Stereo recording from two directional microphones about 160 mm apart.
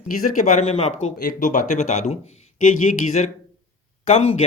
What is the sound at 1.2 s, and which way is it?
Speech, 60° left (ahead or behind).